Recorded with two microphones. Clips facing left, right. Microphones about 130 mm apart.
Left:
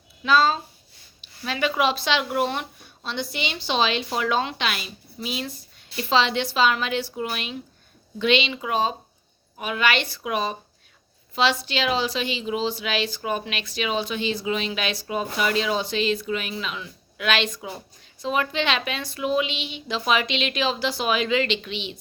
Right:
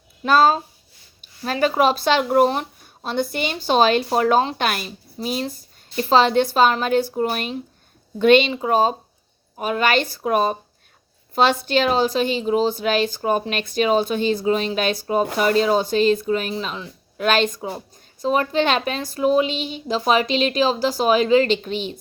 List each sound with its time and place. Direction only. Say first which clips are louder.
0.2 s a woman's voice: right 4 dB; 45° right (ahead or behind)